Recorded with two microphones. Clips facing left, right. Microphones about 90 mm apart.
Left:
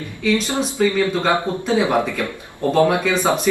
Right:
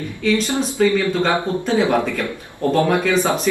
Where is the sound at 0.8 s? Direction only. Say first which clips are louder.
Right 1 dB; 5° left (ahead or behind).